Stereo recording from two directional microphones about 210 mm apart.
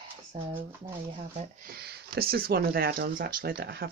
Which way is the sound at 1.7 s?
50° right (ahead or behind).